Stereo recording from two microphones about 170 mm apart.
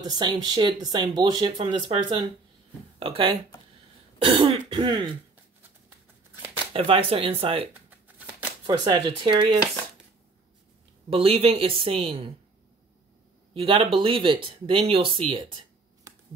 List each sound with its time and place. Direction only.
0.0 s speech: 25° right (ahead or behind)
6.7 s speech: 35° right (ahead or behind)
11.1 s speech: 35° right (ahead or behind)
13.6 s speech: 30° right (ahead or behind)
16.1 s finger snapping: 15° right (ahead or behind)